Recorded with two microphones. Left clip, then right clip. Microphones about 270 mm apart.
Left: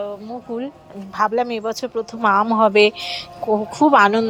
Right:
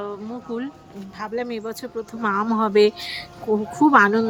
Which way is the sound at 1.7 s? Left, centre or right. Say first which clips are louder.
Left 7 dB; centre.